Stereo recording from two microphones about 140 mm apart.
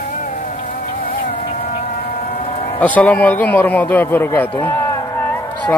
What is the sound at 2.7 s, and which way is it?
A man's voice, 10° left (ahead or behind).